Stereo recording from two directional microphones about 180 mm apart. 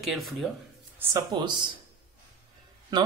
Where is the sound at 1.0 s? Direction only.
20° right (ahead or behind).